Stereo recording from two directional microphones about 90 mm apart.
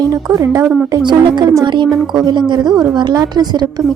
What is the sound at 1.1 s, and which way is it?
A woman's voice, 55° right (ahead or behind).